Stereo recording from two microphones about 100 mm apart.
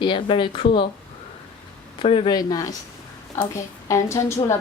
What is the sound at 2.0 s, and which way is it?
Speech, 65° left (ahead or behind).